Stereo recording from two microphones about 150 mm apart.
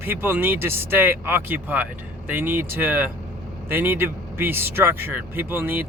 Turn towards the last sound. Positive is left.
turn(degrees=-15)  # may be behind; listen again after turning